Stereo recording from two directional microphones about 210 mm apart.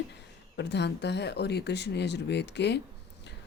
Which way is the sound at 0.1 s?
55° left (ahead or behind).